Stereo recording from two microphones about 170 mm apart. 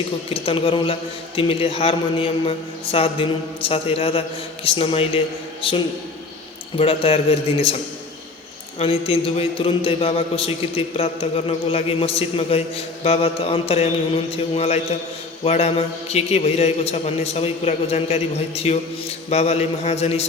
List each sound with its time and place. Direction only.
0.3 s a man's voice: 35° left (ahead or behind)
8.8 s a man's voice: 35° left (ahead or behind)